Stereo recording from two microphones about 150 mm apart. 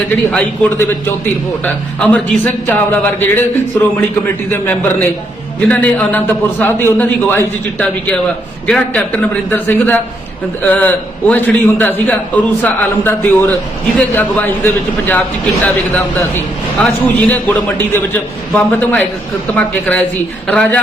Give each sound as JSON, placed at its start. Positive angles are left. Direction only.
{"t": 0.1, "sound": "a man's voice", "side_deg": 10}
{"t": 4.5, "sound": "a man's voice", "side_deg": 15}